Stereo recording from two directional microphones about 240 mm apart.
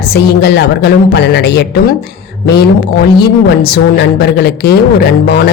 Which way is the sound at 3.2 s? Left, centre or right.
Left.